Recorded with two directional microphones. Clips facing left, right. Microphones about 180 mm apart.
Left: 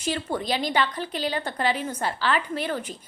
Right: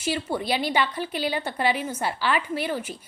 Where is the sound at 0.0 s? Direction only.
10° right (ahead or behind).